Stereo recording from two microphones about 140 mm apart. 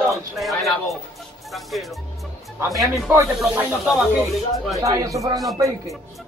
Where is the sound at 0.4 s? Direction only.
Centre (ahead or behind).